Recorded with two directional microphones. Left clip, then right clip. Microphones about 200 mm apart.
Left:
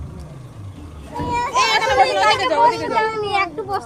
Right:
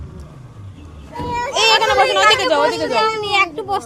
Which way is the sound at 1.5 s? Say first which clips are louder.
Right 4 dB; 45° right (ahead or behind).